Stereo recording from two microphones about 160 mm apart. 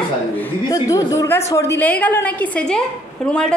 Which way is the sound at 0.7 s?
20° left (ahead or behind).